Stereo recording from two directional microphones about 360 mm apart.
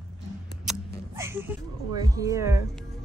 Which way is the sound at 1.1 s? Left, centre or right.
Centre.